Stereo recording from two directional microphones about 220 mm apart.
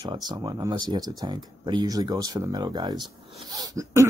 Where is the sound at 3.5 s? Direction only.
15° right (ahead or behind).